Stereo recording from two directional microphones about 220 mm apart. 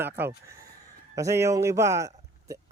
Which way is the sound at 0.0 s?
10° right (ahead or behind).